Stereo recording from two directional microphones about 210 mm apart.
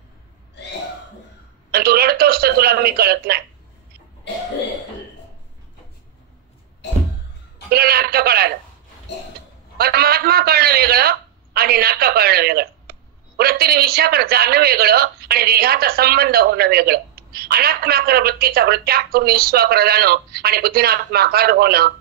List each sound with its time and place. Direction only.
1.7 s a sound: 45° right (ahead or behind)
7.7 s a man's voice: 45° right (ahead or behind)
9.8 s a man's voice: 45° right (ahead or behind)